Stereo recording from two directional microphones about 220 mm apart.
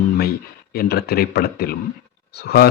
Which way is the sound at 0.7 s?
45° left (ahead or behind).